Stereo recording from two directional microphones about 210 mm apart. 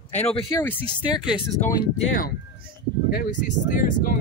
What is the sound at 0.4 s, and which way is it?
Speech, 15° left (ahead or behind).